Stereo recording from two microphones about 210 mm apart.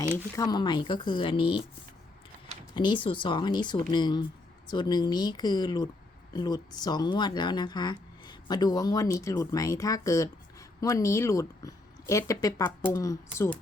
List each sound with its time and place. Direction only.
0.3 s speech: 20° left (ahead or behind)
2.7 s speech: 20° left (ahead or behind)